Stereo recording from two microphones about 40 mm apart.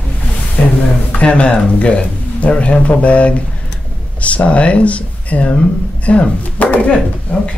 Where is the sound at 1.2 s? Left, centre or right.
Left.